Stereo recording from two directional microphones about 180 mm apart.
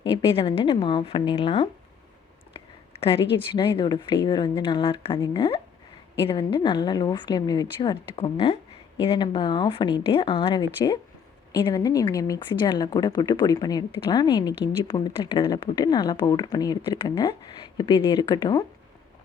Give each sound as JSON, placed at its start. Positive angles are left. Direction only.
{"t": 0.0, "sound": "a woman's voice", "side_deg": 25}
{"t": 3.3, "sound": "a woman's voice", "side_deg": 25}